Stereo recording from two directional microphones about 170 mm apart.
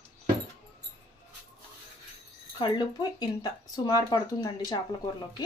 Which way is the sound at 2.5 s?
25° left (ahead or behind).